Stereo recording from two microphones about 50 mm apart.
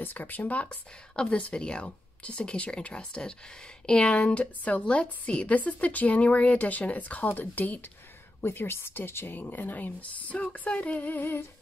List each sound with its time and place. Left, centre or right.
0.0 s speech: left
0.7 s a woman's voice: centre; by 7.8 s left
8.5 s speech: left
11.0 s speech: left